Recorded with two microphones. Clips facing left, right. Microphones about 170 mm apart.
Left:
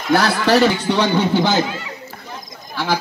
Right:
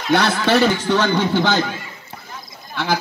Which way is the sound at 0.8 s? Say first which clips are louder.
Left 1 dB; 15° left (ahead or behind).